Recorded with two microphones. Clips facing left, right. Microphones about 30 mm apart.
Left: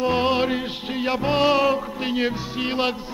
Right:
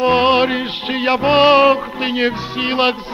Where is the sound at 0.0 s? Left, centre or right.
Right.